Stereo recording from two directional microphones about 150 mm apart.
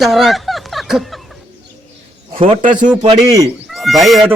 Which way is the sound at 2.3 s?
35° right (ahead or behind).